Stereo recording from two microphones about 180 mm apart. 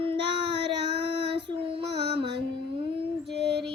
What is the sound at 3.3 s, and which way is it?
Music, 70° right (ahead or behind).